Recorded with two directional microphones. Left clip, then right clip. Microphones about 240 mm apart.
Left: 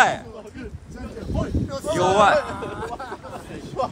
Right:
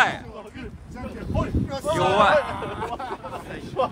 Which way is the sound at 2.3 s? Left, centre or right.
Right.